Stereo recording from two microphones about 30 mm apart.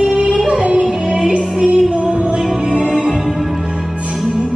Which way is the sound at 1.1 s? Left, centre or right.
Right.